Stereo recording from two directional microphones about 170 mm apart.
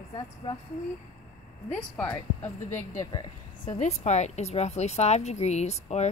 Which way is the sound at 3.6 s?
45° left (ahead or behind).